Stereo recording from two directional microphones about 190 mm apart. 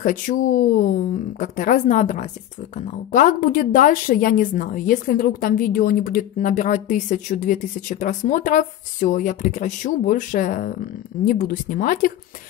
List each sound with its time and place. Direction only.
0.0 s speech: 45° left (ahead or behind)